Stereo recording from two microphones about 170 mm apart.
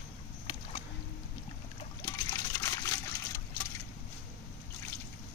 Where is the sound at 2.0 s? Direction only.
20° left (ahead or behind).